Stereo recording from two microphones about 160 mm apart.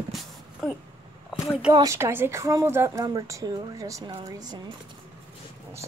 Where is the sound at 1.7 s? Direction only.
20° right (ahead or behind).